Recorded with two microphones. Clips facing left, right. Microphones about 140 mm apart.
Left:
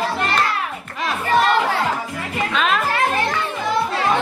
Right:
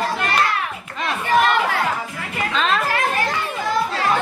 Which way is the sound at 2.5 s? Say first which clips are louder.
Even; 5° left (ahead or behind).